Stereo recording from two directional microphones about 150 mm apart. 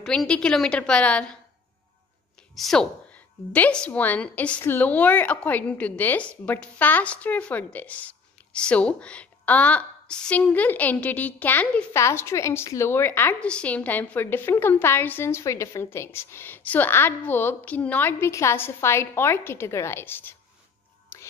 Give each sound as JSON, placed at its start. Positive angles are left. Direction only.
{"t": 0.0, "sound": "a woman's voice", "side_deg": 5}
{"t": 2.5, "sound": "a woman's voice", "side_deg": 0}
{"t": 21.1, "sound": "music", "side_deg": 15}